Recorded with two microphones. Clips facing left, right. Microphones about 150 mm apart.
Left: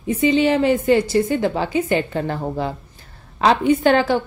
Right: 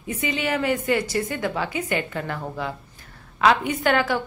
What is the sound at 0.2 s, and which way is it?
A woman's voice, 30° left (ahead or behind).